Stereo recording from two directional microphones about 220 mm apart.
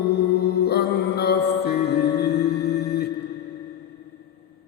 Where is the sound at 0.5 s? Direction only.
45° left (ahead or behind).